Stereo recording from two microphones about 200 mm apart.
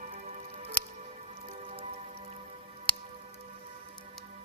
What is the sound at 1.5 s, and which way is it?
Rain on surface, 35° right (ahead or behind).